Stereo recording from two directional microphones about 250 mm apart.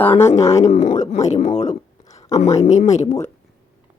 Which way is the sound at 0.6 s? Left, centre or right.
Left.